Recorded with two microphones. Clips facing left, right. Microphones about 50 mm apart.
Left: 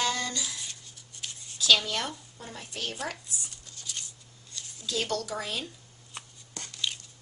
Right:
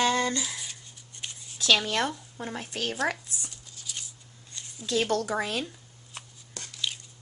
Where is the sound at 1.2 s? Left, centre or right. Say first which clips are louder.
Right 1 dB; right.